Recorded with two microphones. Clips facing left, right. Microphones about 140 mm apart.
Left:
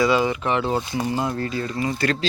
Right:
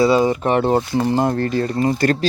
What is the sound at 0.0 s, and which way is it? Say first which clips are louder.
Speech: right 5 dB; 35° right (ahead or behind).